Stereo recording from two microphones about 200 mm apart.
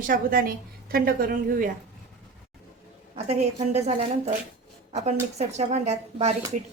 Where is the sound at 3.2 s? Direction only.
35° right (ahead or behind).